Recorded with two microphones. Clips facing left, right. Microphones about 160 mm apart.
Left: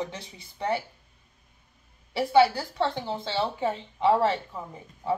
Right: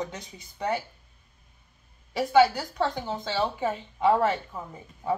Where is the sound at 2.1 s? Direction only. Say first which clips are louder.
Even; 30° left (ahead or behind).